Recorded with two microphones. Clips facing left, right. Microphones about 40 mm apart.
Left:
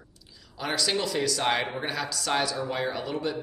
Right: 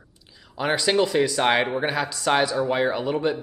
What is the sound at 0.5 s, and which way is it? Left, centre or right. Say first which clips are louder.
Speech: right 7 dB; right.